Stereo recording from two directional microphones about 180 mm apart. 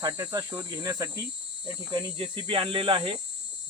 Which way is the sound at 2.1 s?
30° right (ahead or behind).